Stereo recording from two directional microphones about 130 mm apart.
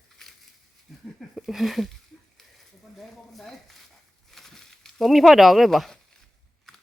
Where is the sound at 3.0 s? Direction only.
Centre (ahead or behind).